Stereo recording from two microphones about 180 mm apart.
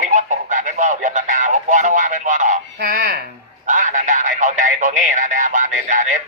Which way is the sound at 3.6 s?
45° right (ahead or behind).